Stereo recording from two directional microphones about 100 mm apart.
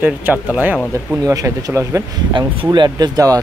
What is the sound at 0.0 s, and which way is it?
Speech, 15° right (ahead or behind).